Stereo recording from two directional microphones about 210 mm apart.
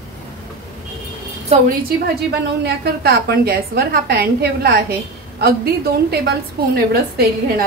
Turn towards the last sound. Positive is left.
turn(degrees=-50)  # may be behind; listen again after turning